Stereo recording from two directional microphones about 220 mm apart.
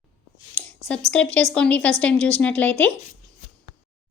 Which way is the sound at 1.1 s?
5° left (ahead or behind).